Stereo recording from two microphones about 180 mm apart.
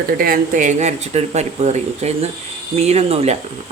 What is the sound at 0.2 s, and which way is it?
Speech, 50° right (ahead or behind).